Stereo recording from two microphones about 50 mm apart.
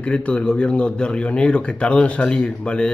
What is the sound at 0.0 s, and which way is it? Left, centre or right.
A man's voice, left.